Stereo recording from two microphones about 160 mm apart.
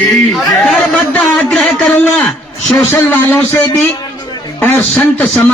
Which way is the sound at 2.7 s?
15° left (ahead or behind).